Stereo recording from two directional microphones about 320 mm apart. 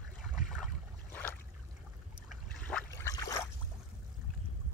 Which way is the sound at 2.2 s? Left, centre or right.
Centre.